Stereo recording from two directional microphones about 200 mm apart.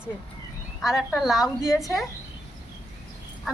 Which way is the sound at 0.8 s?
Centre (ahead or behind).